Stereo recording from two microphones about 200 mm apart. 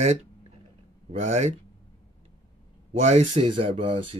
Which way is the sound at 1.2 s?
35° right (ahead or behind).